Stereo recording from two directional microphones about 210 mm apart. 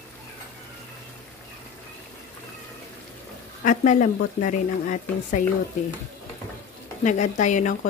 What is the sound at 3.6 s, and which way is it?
Speech, 35° left (ahead or behind).